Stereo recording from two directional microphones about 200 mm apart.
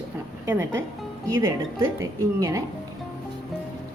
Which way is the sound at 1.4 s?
15° right (ahead or behind).